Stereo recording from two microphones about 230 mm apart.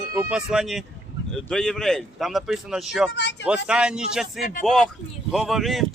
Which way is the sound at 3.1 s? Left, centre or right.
Left.